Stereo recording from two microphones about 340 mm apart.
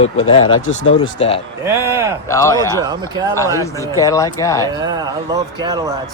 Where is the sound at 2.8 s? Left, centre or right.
Centre.